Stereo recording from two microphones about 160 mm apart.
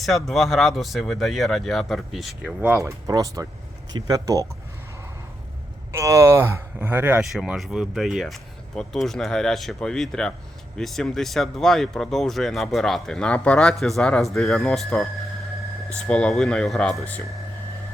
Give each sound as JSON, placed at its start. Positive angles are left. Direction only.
{"t": 0.3, "sound": "speech", "side_deg": 0}
{"t": 2.8, "sound": "speech", "side_deg": -20}
{"t": 5.9, "sound": "speech", "side_deg": -20}